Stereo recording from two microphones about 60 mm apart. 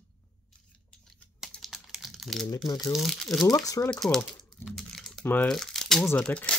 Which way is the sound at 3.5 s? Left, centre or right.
Left.